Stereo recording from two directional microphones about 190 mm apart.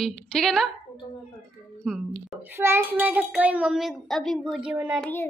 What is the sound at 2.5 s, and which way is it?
A child's voice, 15° right (ahead or behind).